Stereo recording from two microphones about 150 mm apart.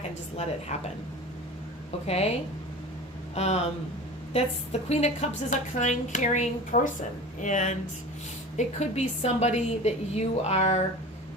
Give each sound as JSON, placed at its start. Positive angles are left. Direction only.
{"t": 0.7, "sound": "a woman's voice", "side_deg": 50}
{"t": 2.0, "sound": "a woman's voice", "side_deg": 45}
{"t": 3.3, "sound": "a woman's voice", "side_deg": 45}